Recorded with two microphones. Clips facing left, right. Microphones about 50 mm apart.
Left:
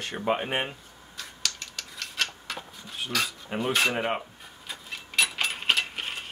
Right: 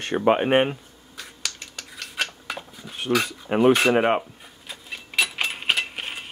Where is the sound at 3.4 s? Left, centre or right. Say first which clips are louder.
Right 10 dB; right.